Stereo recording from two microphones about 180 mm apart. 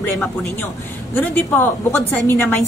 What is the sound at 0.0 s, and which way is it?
A man's voice, 5° left (ahead or behind).